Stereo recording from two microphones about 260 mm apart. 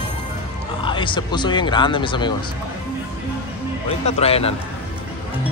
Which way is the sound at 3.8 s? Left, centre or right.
Left.